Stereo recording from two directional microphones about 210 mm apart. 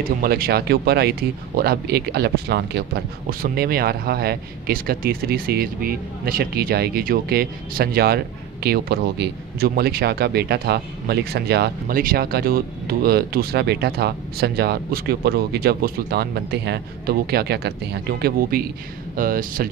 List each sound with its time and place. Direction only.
0.0 s speech: 45° right (ahead or behind)